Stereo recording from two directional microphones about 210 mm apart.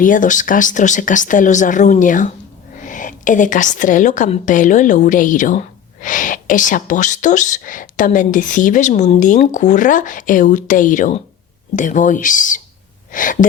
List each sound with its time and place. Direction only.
0.0 s a woman's voice: 40° left (ahead or behind)